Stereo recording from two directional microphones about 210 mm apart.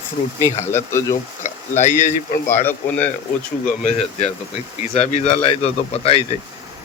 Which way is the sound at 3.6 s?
35° left (ahead or behind).